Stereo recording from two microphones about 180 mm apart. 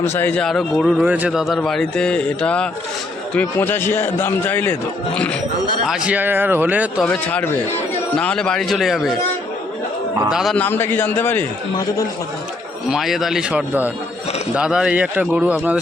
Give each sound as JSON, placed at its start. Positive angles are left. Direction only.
{"t": 0.0, "sound": "a man's voice", "side_deg": 10}
{"t": 7.0, "sound": "a man's voice", "side_deg": 5}
{"t": 10.2, "sound": "a man's voice", "side_deg": 0}
{"t": 11.7, "sound": "speech", "side_deg": 20}
{"t": 12.9, "sound": "a man's voice", "side_deg": 0}